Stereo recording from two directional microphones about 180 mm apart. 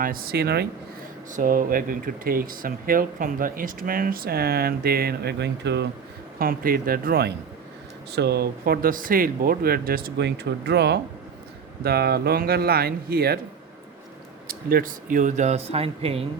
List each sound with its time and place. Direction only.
0.0 s speech: 55° right (ahead or behind)
1.3 s speech: 50° right (ahead or behind); by 5.9 s 70° right (ahead or behind)
6.4 s speech: 55° right (ahead or behind)
14.4 s speech: 55° right (ahead or behind); by 16.2 s 35° right (ahead or behind)